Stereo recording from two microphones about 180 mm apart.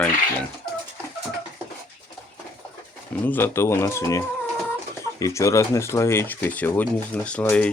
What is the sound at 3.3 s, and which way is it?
Speech, 15° left (ahead or behind).